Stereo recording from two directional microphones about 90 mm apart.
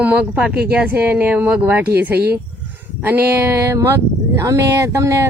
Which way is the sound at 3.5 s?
30° right (ahead or behind).